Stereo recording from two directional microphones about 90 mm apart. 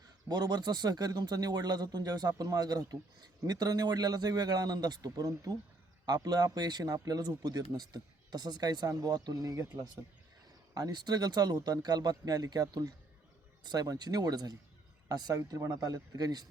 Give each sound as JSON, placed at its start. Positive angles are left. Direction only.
{"t": 0.3, "sound": "speech", "side_deg": -45}
{"t": 15.4, "sound": "speech", "side_deg": -35}